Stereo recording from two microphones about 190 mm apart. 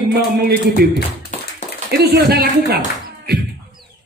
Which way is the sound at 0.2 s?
55° right (ahead or behind).